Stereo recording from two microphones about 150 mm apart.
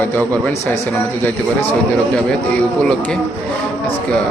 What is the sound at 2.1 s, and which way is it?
A man's voice, 5° left (ahead or behind).